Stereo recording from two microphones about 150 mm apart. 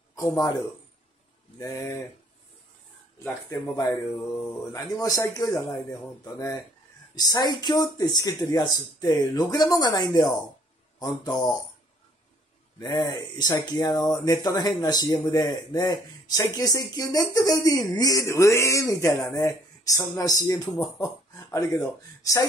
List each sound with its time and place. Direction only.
0.1 s a man's voice: 20° left (ahead or behind)
3.4 s speech: 20° left (ahead or behind)
12.7 s speech: 25° left (ahead or behind)